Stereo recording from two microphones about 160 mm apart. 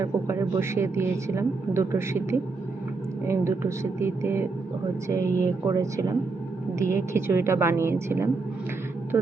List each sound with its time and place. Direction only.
0.0 s a woman's voice: 15° right (ahead or behind)
3.2 s a woman's voice: 15° right (ahead or behind)